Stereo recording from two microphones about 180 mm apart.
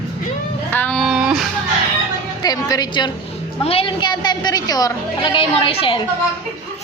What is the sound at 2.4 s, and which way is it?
A woman's voice, 20° left (ahead or behind).